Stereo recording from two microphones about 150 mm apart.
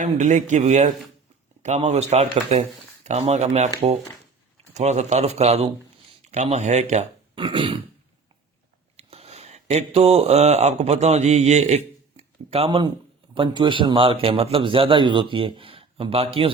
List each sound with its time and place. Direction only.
0.0 s speech: 50° right (ahead or behind)
4.7 s speech: 50° right (ahead or behind)
7.3 s a man's voice: 35° right (ahead or behind)
9.0 s a man's voice: 45° right (ahead or behind)